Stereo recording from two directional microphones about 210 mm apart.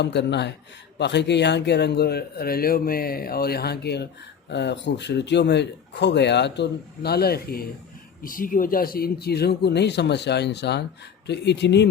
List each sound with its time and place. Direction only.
0.0 s a man's voice: 55° left (ahead or behind)